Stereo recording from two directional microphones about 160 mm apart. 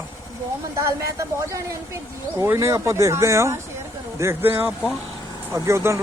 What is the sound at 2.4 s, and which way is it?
Speech, 15° right (ahead or behind).